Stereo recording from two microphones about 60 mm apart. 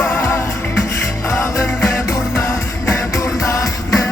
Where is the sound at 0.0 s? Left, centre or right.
Left.